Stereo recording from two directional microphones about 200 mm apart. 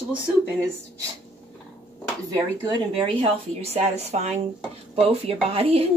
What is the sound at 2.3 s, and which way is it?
Speech, 20° right (ahead or behind).